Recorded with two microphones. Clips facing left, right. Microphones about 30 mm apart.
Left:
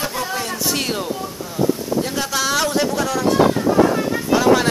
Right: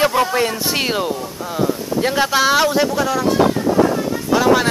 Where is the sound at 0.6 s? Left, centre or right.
Centre.